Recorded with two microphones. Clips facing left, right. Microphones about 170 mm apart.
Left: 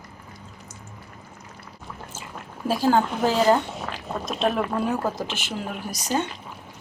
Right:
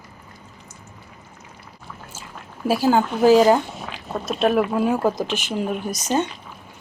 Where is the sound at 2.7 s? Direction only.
10° right (ahead or behind).